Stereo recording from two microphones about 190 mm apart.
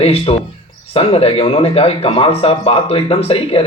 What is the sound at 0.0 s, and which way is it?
A man's voice, 30° left (ahead or behind).